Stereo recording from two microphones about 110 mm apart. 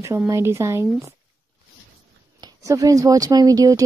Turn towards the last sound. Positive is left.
turn(degrees=-35)  # may be behind; listen again after turning